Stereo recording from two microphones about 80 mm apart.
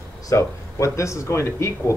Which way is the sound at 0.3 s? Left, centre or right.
Left.